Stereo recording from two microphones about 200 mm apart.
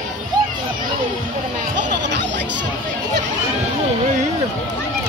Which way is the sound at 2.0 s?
60° right (ahead or behind).